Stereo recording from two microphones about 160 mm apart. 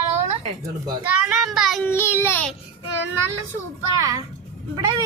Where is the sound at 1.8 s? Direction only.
15° left (ahead or behind).